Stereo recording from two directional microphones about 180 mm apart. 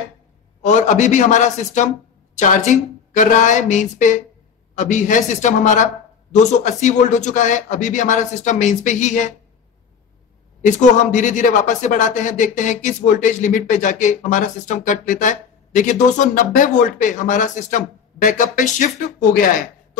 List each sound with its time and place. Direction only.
0.6 s a man's voice: 40° left (ahead or behind)
10.6 s a man's voice: 45° left (ahead or behind)